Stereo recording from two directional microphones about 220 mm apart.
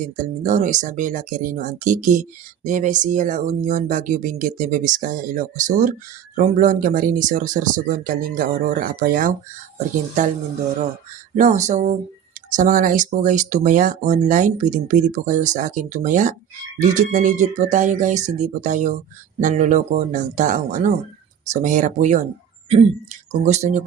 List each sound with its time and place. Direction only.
0.2 s speech: 35° right (ahead or behind)
11.3 s speech: 35° right (ahead or behind)